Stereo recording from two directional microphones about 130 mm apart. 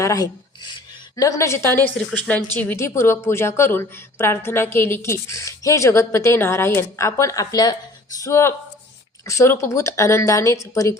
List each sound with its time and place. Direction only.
0.0 s filing: 25° left (ahead or behind)
1.1 s a woman's voice: 25° left (ahead or behind)